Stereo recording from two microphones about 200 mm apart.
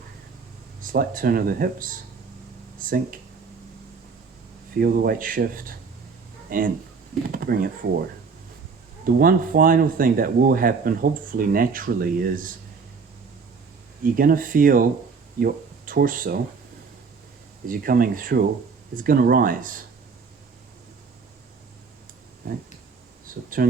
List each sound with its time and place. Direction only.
0.8 s speech: 45° right (ahead or behind)
4.8 s speech: 45° right (ahead or behind)
9.0 s speech: 45° right (ahead or behind)
14.0 s speech: 45° right (ahead or behind)
17.7 s speech: 45° right (ahead or behind)
22.4 s speech: 45° right (ahead or behind)